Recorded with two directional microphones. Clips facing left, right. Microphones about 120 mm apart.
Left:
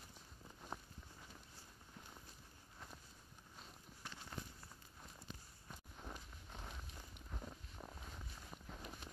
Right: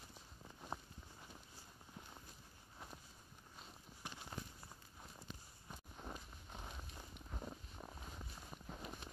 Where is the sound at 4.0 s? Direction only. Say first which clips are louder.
Right 2 dB; 15° right (ahead or behind).